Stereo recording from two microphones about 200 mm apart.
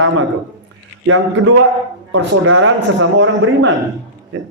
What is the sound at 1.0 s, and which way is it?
A man's voice, 75° right (ahead or behind).